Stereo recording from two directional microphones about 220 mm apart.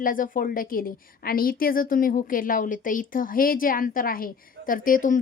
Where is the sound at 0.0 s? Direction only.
40° left (ahead or behind).